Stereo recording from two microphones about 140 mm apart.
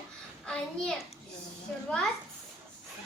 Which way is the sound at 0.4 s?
5° left (ahead or behind).